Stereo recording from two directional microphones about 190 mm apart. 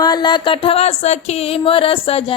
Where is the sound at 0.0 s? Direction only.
20° left (ahead or behind).